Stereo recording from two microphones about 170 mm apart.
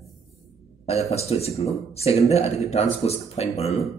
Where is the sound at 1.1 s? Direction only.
35° left (ahead or behind).